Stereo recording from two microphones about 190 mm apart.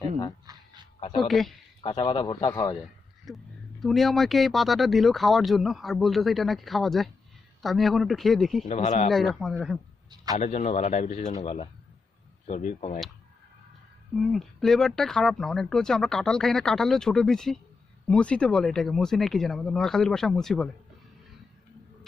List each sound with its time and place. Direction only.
0.4 s a sound: 25° right (ahead or behind)
0.9 s a woman's voice: 30° left (ahead or behind)
1.2 s speech: centre (ahead or behind)
1.8 s a man's voice: 25° left (ahead or behind)
3.2 s speech: centre (ahead or behind)
8.6 s speech: 40° left (ahead or behind)
9.0 s speech: centre (ahead or behind)
10.3 s speech: 35° left (ahead or behind)
14.1 s speech: centre (ahead or behind)